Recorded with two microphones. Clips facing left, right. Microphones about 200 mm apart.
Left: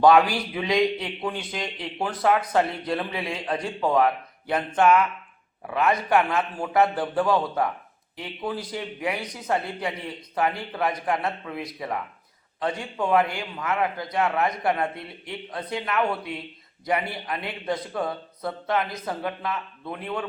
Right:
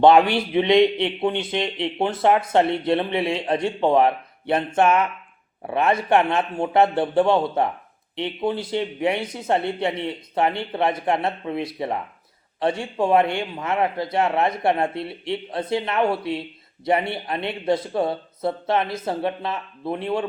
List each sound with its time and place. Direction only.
0.0 s a man's voice: 25° right (ahead or behind)